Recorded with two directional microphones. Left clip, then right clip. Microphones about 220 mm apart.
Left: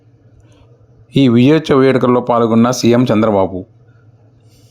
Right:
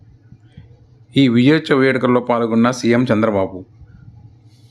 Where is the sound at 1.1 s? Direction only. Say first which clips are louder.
Left 3 dB; 10° left (ahead or behind).